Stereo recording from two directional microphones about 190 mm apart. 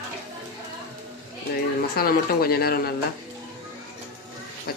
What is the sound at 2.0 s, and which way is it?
Speech, 55° left (ahead or behind).